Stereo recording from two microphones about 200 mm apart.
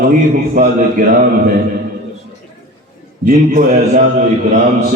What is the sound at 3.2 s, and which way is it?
Speech, 45° right (ahead or behind).